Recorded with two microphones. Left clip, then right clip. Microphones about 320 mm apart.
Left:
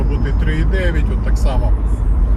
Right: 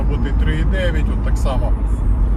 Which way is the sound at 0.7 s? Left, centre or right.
Right.